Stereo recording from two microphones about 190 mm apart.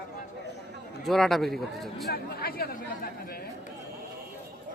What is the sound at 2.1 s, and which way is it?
Speech, 55° left (ahead or behind).